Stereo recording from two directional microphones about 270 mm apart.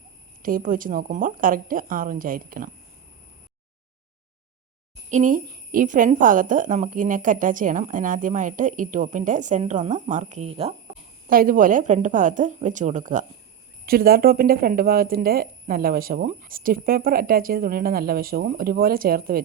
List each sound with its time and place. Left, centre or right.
0.4 s speech: right
5.0 s speech: right
11.3 s speech: right